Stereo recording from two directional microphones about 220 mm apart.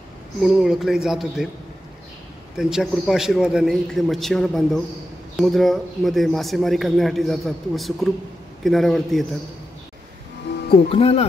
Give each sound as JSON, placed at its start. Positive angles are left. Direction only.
{"t": 0.4, "sound": "a man's voice", "side_deg": 0}
{"t": 2.5, "sound": "a man's voice", "side_deg": 0}
{"t": 10.9, "sound": "speech", "side_deg": 30}